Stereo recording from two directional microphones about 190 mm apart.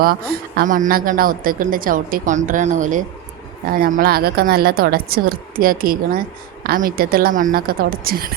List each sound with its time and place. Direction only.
0.0 s speech: 50° right (ahead or behind)